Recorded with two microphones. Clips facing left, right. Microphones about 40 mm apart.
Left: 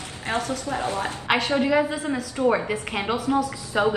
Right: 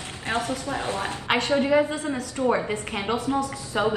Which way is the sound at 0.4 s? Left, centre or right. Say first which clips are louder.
Left 2 dB; right.